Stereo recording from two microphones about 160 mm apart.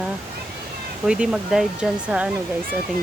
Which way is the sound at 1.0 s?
5° right (ahead or behind).